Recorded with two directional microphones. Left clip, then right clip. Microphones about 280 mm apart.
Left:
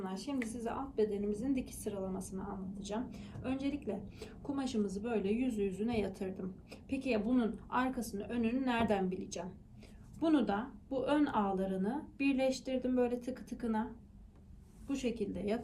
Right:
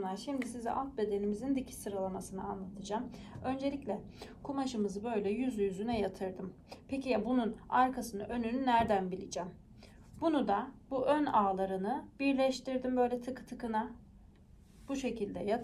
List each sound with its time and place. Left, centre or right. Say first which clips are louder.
0.0 s a woman's voice: right 2 dB; right
14.8 s a woman's voice: even; centre